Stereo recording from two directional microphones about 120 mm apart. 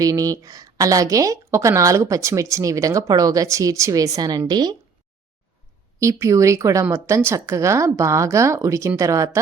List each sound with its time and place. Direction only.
0.0 s a woman's voice: 30° right (ahead or behind)
6.0 s a woman's voice: 25° right (ahead or behind)